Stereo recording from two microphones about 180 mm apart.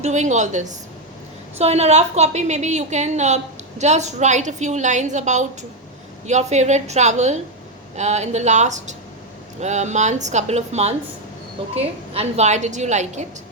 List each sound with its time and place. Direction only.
0.0 s a woman's voice: 40° right (ahead or behind)